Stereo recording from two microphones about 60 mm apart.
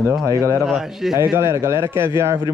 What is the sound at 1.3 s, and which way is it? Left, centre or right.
Speech, right.